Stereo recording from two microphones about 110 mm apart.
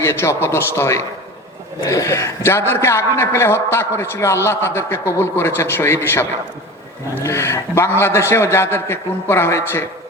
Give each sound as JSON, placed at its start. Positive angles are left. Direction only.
{"t": 0.0, "sound": "a man's voice", "side_deg": 25}